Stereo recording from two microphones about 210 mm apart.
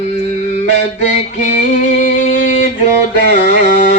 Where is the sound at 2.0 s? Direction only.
35° left (ahead or behind).